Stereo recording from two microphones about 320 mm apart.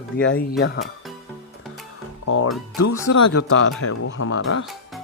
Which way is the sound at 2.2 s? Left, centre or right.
Left.